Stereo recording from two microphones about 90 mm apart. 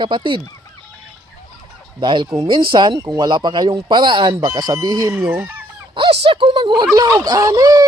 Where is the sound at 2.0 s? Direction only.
60° right (ahead or behind).